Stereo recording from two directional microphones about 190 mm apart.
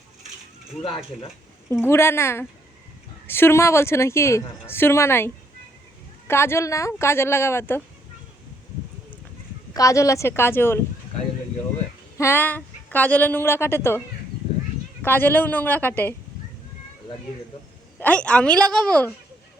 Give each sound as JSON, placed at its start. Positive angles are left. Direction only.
{"t": 0.9, "sound": "speech", "side_deg": 30}
{"t": 1.7, "sound": "a woman's voice", "side_deg": 15}
{"t": 9.7, "sound": "a woman's voice", "side_deg": 15}
{"t": 12.1, "sound": "a woman's voice", "side_deg": 15}
{"t": 15.0, "sound": "a woman's voice", "side_deg": 10}
{"t": 18.0, "sound": "a woman's voice", "side_deg": 5}